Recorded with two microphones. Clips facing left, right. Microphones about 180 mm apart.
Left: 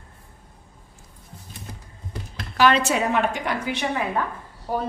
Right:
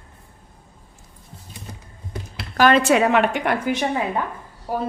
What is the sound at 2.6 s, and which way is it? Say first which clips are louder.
A woman's voice: right 4 dB; 50° right (ahead or behind).